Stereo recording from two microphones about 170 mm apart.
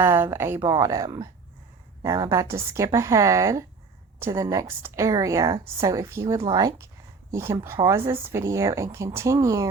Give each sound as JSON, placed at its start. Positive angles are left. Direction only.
{"t": 0.0, "sound": "speech", "side_deg": -15}